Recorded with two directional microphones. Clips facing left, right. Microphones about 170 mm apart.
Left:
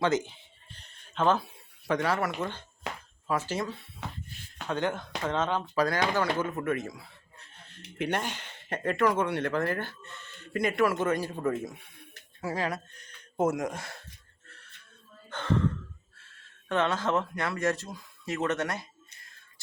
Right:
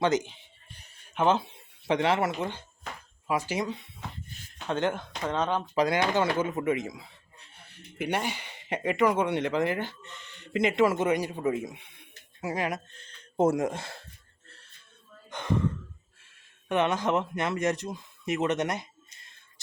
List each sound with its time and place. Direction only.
0.0 s a sound: 20° right (ahead or behind)
3.2 s speech: 15° right (ahead or behind)
14.4 s music: 30° right (ahead or behind)
15.3 s sigh: 15° right (ahead or behind)
16.1 s speech: 15° right (ahead or behind)